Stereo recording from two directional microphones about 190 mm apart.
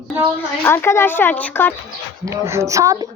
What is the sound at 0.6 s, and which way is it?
Speech, 10° left (ahead or behind).